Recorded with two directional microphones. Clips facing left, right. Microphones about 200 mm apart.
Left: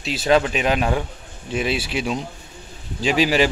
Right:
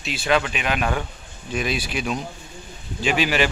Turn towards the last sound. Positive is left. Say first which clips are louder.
# left 3 dB
turn(degrees=35)  # may be behind; listen again after turning